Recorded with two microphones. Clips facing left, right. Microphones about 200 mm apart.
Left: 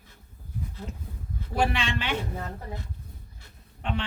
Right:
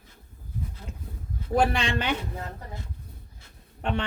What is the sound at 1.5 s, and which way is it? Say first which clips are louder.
Speech: right 3 dB; 40° right (ahead or behind).